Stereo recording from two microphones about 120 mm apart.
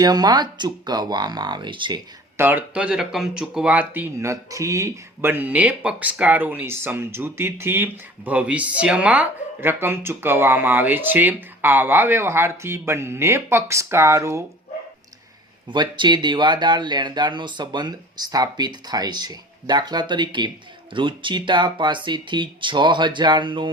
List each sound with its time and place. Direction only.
0.0 s speech: 35° right (ahead or behind)
2.4 s speech: 15° right (ahead or behind)
15.7 s speech: 40° right (ahead or behind)